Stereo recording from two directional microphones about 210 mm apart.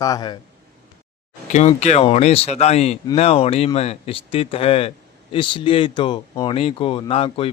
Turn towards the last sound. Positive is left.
turn(degrees=25)  # may be behind; listen again after turning